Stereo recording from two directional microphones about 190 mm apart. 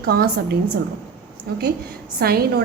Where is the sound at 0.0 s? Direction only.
55° right (ahead or behind).